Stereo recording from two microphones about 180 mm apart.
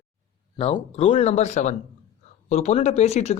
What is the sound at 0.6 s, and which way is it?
A man's voice, 30° left (ahead or behind).